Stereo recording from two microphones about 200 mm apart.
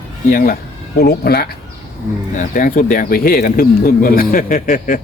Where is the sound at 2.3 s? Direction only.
40° left (ahead or behind).